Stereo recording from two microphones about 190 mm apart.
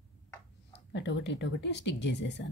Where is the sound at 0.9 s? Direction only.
70° left (ahead or behind).